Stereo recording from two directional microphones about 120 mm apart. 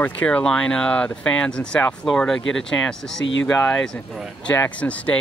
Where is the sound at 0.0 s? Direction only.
10° left (ahead or behind).